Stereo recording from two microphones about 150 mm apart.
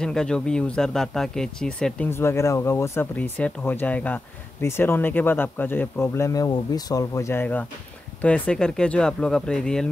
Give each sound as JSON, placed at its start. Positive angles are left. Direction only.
{"t": 0.0, "sound": "speech", "side_deg": 5}
{"t": 2.0, "sound": "speech", "side_deg": 15}